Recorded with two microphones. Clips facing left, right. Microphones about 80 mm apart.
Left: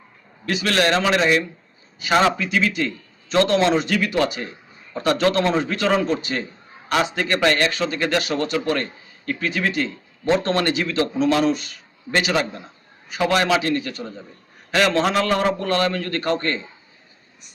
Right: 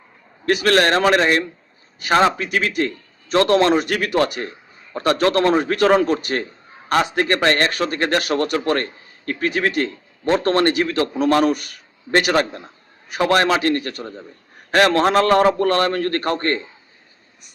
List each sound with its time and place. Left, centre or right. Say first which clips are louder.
0.4 s a man's voice: right 4 dB; right
4.9 s a man's voice: right 2 dB; right
8.5 s a man's voice: right 2 dB; right